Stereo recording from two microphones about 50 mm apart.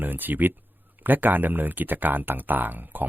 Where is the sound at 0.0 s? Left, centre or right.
Right.